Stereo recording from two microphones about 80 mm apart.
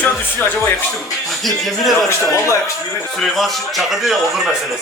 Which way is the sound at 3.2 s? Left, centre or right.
Centre.